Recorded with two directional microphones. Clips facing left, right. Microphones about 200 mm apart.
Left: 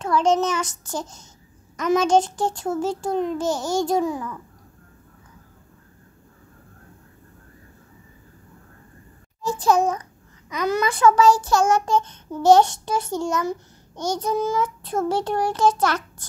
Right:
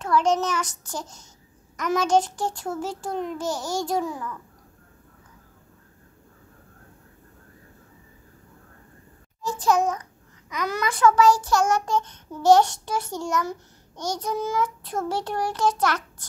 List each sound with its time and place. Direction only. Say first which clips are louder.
0.0 s child singing: left 2 dB; 25° left (ahead or behind)
9.4 s a child's voice: left 3 dB; 30° left (ahead or behind)
10.5 s child singing: left 5 dB; 25° left (ahead or behind)